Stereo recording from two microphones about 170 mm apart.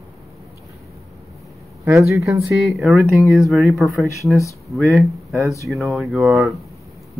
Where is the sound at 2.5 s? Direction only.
Centre (ahead or behind).